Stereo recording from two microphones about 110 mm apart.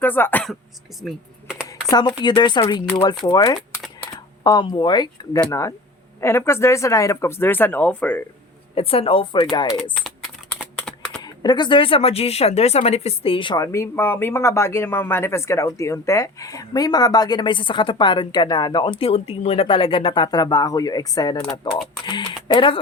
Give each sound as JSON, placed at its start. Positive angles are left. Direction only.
{"t": 0.0, "sound": "speech", "side_deg": 15}
{"t": 1.0, "sound": "computer keyboard", "side_deg": -10}
{"t": 1.9, "sound": "speech", "side_deg": 40}
{"t": 3.2, "sound": "speech", "side_deg": 35}
{"t": 5.5, "sound": "speech", "side_deg": 30}
{"t": 8.7, "sound": "speech", "side_deg": 60}
{"t": 9.9, "sound": "typing", "side_deg": 0}
{"t": 11.2, "sound": "speech", "side_deg": 40}
{"t": 13.6, "sound": "speech", "side_deg": 25}